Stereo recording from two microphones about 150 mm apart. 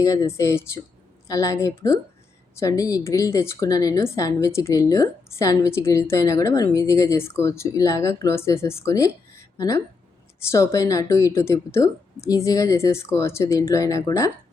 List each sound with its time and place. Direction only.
0.0 s a woman's voice: 25° left (ahead or behind)
9.3 s a sound: 20° left (ahead or behind)
10.5 s a woman's voice: 20° left (ahead or behind)